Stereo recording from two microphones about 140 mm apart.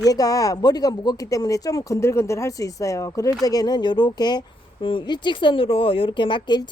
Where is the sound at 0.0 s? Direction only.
25° left (ahead or behind).